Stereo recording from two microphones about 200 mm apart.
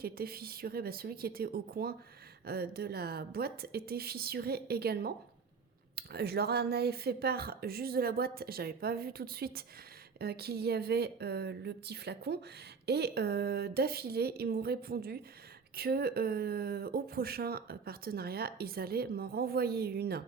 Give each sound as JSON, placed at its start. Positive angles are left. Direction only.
{"t": 0.0, "sound": "speech", "side_deg": -50}